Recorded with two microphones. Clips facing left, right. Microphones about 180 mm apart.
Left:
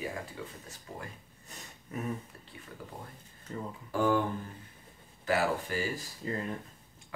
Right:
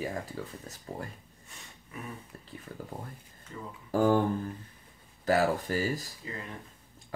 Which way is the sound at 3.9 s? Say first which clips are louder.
Right 3 dB; 40° right (ahead or behind).